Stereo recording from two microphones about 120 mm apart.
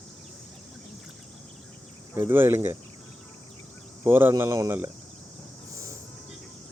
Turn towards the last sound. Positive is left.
turn(degrees=-25)  # may be behind; listen again after turning